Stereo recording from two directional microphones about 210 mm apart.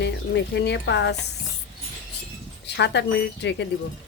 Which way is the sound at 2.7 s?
55° left (ahead or behind).